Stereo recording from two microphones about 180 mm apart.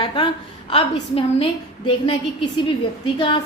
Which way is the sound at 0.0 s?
25° left (ahead or behind).